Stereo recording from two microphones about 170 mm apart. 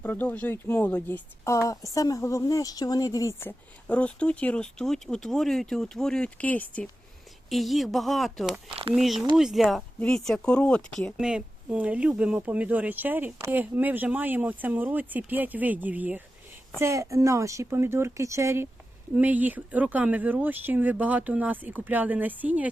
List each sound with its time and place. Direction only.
0.0 s speech: 10° left (ahead or behind); by 22.7 s 10° right (ahead or behind)